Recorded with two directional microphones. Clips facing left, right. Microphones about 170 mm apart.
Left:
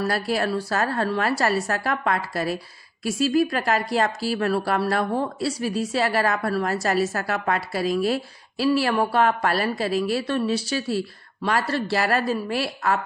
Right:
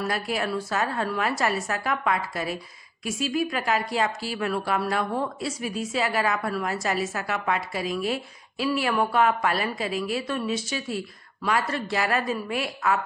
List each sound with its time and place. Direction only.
0.1 s speech: 35° left (ahead or behind)